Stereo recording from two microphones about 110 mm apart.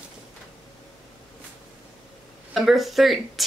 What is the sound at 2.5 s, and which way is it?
Speech, centre (ahead or behind).